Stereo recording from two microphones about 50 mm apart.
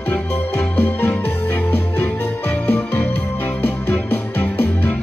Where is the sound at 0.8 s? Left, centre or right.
Left.